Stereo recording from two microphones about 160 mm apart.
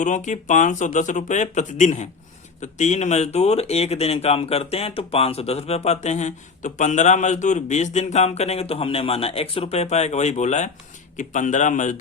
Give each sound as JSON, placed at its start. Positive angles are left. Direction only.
{"t": 0.0, "sound": "speech", "side_deg": 50}